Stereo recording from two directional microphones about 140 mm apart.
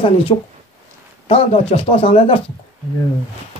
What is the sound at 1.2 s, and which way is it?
Speech, 45° left (ahead or behind).